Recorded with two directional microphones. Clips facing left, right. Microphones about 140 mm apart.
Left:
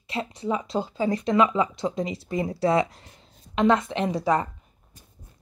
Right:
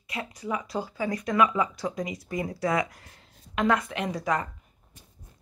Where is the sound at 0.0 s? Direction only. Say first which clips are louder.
Left 5 dB; 30° left (ahead or behind).